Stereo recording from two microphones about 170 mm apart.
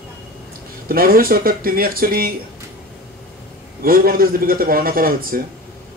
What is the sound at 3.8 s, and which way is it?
A man's voice, 60° right (ahead or behind).